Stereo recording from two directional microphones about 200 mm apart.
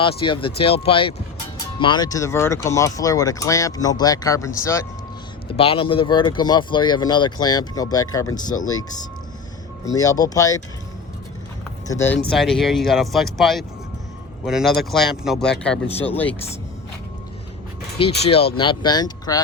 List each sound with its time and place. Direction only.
0.0 s speech: 25° left (ahead or behind)
5.5 s speech: 30° left (ahead or behind)
9.9 s speech: 15° left (ahead or behind)
11.9 s speech: 10° left (ahead or behind)
18.2 s speech: 30° left (ahead or behind)